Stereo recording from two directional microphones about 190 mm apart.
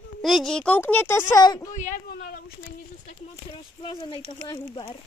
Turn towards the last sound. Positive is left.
turn(degrees=25)  # may be behind; listen again after turning